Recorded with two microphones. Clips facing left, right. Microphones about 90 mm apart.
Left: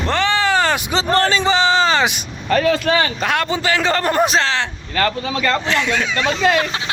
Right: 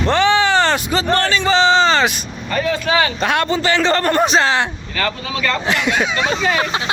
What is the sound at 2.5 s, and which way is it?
Speech, 70° left (ahead or behind).